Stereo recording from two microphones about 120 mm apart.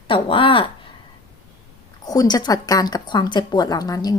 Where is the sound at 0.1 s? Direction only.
45° left (ahead or behind).